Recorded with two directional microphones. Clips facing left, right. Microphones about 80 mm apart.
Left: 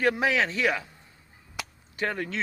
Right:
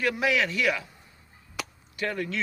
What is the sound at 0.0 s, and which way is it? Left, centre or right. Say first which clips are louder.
Speech: left 1 dB; left.